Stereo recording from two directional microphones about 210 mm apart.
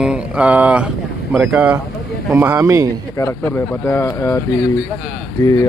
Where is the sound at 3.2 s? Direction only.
10° left (ahead or behind).